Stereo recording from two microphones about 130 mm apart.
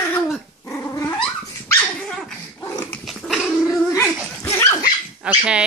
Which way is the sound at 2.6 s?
20° left (ahead or behind).